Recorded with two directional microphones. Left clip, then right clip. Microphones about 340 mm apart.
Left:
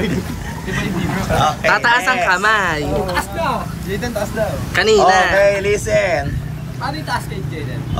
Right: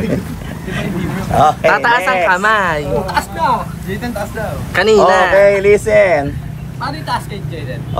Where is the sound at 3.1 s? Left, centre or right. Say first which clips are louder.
Right 4 dB; centre.